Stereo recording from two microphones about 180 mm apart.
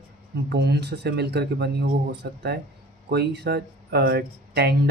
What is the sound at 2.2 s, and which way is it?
Speech, 55° right (ahead or behind).